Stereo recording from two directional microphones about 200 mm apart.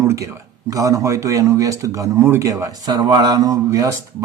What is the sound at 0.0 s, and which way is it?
Speech, 15° right (ahead or behind).